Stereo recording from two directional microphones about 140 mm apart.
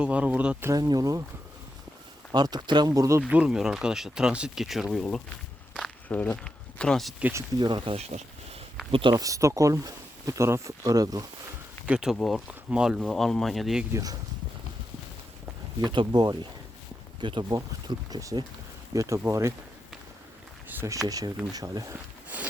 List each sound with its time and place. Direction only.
0.0 s speech: 10° right (ahead or behind)
0.7 s speech: 25° right (ahead or behind)
2.3 s speech: 30° right (ahead or behind)
3.2 s speech: 10° right (ahead or behind)
7.2 s speech: 10° right (ahead or behind)
7.6 s speech: 35° right (ahead or behind)
9.2 s speech: 25° right (ahead or behind)
11.9 s speech: 5° right (ahead or behind)
13.9 s speech: 25° right (ahead or behind)
15.9 s speech: 30° right (ahead or behind)
20.7 s speech: 20° right (ahead or behind)
22.3 s a sound: 10° right (ahead or behind)